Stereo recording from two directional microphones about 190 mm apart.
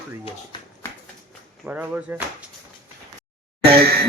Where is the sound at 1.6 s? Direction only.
10° right (ahead or behind).